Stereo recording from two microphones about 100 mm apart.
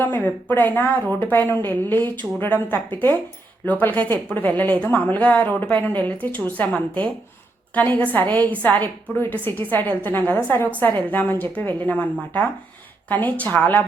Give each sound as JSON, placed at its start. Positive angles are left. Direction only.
{"t": 0.0, "sound": "a woman's voice", "side_deg": 15}